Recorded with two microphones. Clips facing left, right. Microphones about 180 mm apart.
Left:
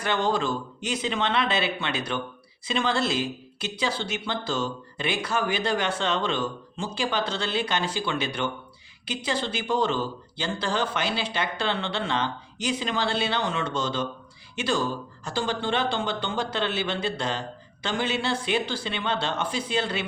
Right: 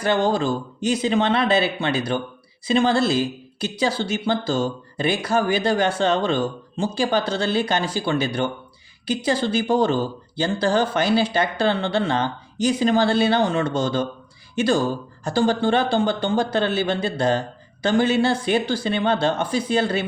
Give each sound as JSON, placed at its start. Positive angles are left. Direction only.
{"t": 0.0, "sound": "speech", "side_deg": -35}